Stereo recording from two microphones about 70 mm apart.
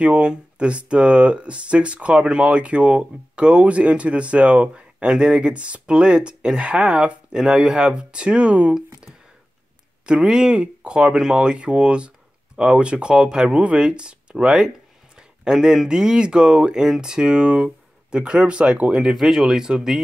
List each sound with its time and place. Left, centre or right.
0.0 s speech: centre
10.0 s speech: centre
19.1 s speech: centre